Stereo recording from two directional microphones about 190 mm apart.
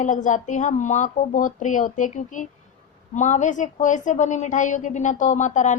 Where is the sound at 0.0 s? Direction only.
40° left (ahead or behind).